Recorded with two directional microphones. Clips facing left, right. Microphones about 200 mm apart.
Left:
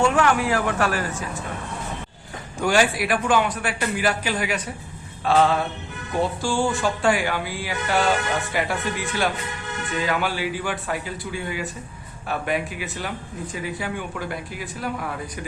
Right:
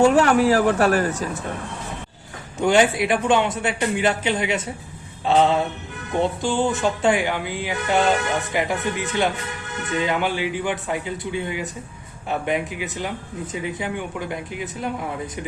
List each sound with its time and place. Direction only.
0.0 s a woman's voice: 40° right (ahead or behind)
2.6 s speech: 20° right (ahead or behind)